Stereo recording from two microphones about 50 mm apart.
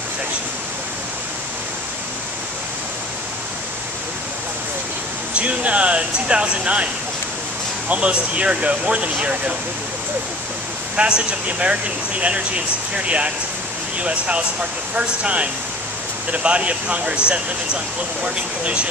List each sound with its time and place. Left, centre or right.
5.3 s speech: right
7.9 s speech: right
11.0 s speech: right
18.2 s speech: right